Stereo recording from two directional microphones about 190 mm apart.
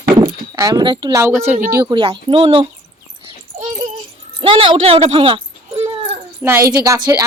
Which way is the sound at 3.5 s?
35° right (ahead or behind).